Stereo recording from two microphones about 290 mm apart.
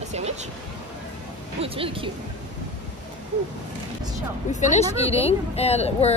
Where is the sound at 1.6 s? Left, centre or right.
Centre.